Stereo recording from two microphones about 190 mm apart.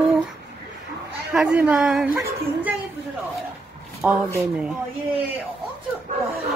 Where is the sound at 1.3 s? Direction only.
5° right (ahead or behind).